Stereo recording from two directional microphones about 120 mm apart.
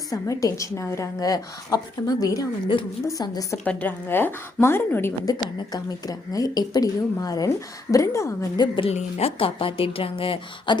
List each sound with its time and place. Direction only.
0.1 s a woman's voice: 30° left (ahead or behind)
3.6 s a woman's voice: 10° left (ahead or behind)
5.7 s a woman's voice: 30° left (ahead or behind)
8.5 s a woman's voice: 40° left (ahead or behind)
8.9 s a woman's voice: 65° left (ahead or behind); by 10.8 s 50° left (ahead or behind)